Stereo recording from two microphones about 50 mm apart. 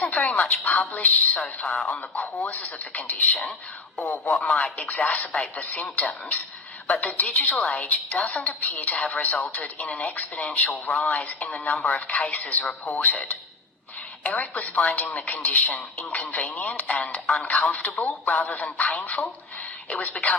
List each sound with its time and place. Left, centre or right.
0.0 s a woman's voice: left
14.3 s a woman's voice: left